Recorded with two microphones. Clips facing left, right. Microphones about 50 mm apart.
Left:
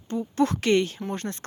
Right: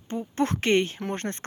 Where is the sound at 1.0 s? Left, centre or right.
Right.